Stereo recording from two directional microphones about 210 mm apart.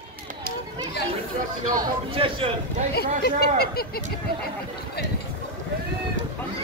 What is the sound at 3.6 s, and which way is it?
Fowl, 45° left (ahead or behind).